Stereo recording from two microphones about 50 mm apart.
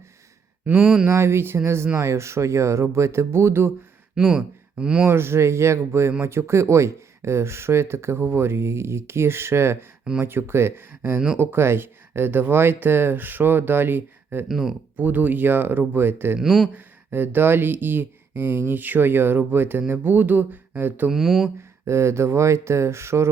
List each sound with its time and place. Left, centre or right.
0.8 s speech: centre
1.0 s speech: right
4.1 s speech: centre
5.0 s speech: right
14.4 s speech: centre
14.9 s a sound: right
16.0 s speech: right
16.4 s speech: centre
16.7 s speech: right
20.0 s a sound: right
21.1 s speech: centre
21.8 s speech: right